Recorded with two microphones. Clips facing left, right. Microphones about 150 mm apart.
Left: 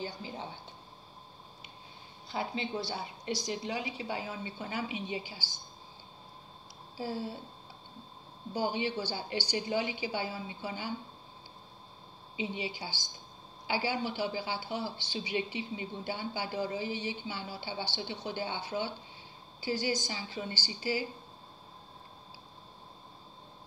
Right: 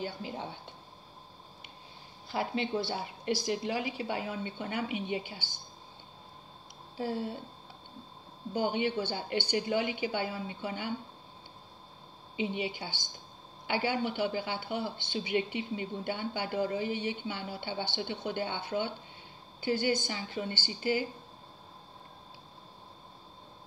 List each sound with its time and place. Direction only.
0.0 s speech: 60° right (ahead or behind)
2.3 s speech: 60° right (ahead or behind)
7.0 s speech: 55° right (ahead or behind)
8.5 s speech: 55° right (ahead or behind)
12.4 s speech: 55° right (ahead or behind)